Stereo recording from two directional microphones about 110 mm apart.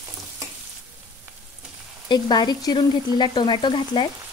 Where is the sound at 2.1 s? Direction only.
40° left (ahead or behind).